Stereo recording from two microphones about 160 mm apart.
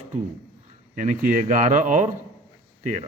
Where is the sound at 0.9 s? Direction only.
50° right (ahead or behind).